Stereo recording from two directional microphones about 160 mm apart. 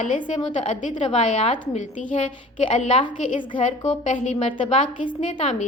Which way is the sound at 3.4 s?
35° left (ahead or behind).